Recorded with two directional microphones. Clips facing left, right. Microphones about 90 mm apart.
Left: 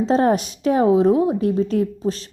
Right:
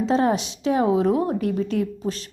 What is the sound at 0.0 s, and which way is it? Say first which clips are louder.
A woman's voice: left 3 dB; 35° left (ahead or behind).